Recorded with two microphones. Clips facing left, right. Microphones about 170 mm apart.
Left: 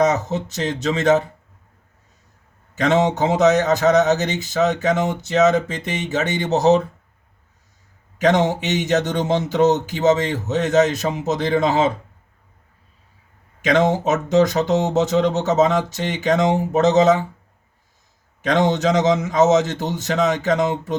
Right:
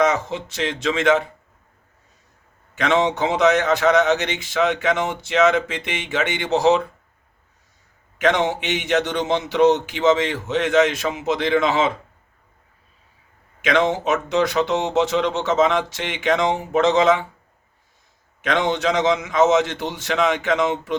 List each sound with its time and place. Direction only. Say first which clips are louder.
0.0 s speech: left 1 dB; 40° left (ahead or behind)
2.7 s speech: left 2 dB; 40° left (ahead or behind)
8.2 s speech: left 2 dB; 40° left (ahead or behind)
13.6 s speech: left 2 dB; 40° left (ahead or behind)
18.4 s speech: left 3 dB; 40° left (ahead or behind)